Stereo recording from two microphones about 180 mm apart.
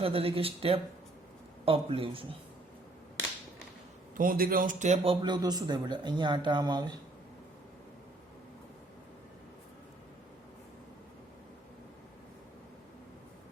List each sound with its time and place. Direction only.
0.0 s speech: 30° right (ahead or behind)
4.2 s speech: 50° right (ahead or behind)
5.2 s speech: 25° right (ahead or behind)